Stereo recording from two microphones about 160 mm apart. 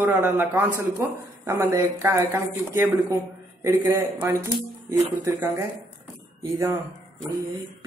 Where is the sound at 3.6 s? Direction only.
20° right (ahead or behind).